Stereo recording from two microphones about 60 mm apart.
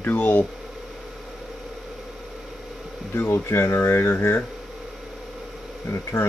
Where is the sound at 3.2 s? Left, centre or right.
Left.